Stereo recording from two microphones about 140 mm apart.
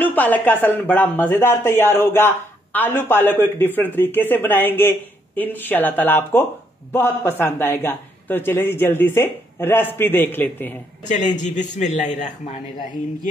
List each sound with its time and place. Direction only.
0.0 s speech: 10° left (ahead or behind)
11.3 s a man's voice: 60° left (ahead or behind)